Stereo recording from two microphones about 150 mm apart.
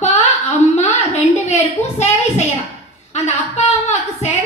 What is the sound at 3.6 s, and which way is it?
Speech, 45° left (ahead or behind).